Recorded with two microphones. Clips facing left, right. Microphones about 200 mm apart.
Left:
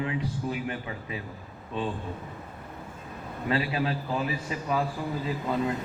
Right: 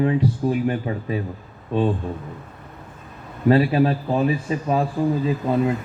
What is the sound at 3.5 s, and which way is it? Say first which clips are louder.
Speech: right 11 dB; 45° right (ahead or behind).